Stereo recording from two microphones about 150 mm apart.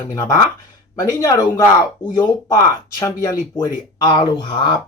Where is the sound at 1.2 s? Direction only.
20° left (ahead or behind).